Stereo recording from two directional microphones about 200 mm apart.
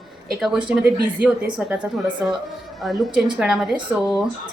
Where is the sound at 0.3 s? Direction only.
5° right (ahead or behind).